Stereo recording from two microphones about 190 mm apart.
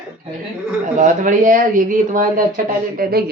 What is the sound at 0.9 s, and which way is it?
Speech, 40° right (ahead or behind).